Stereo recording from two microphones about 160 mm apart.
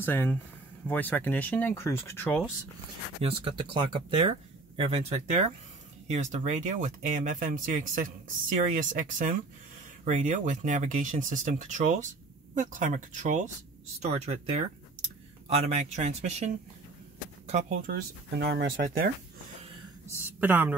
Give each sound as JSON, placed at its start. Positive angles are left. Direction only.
{"t": 0.0, "sound": "speech", "side_deg": 15}
{"t": 3.2, "sound": "speech", "side_deg": -35}
{"t": 17.8, "sound": "speech", "side_deg": -85}
{"t": 20.2, "sound": "speech", "side_deg": -10}